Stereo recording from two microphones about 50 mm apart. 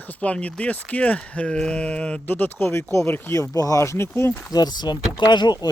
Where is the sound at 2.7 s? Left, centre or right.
Left.